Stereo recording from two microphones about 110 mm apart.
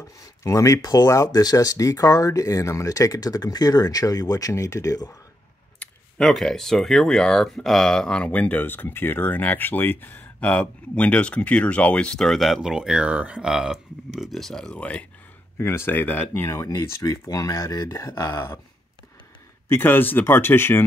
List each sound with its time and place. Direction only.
0.4 s speech: 30° left (ahead or behind)
5.8 s speech: 5° left (ahead or behind)
15.5 s speech: 25° left (ahead or behind)
19.7 s speech: 20° left (ahead or behind)